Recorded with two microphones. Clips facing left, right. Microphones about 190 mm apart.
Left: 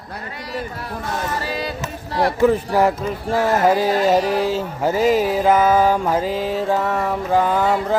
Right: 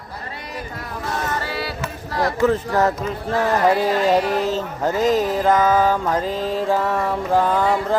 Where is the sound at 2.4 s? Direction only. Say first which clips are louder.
Left 2 dB; 10° left (ahead or behind).